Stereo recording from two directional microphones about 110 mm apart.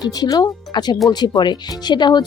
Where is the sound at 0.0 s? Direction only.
40° left (ahead or behind).